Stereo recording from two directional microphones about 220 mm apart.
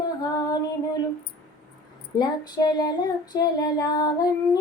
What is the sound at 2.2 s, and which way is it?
Female singing, 20° left (ahead or behind).